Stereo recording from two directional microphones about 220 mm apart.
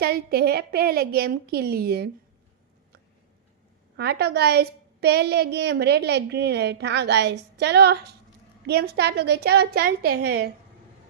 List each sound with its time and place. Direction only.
0.0 s a woman's voice: 45° right (ahead or behind)
3.9 s a woman's voice: 45° right (ahead or behind)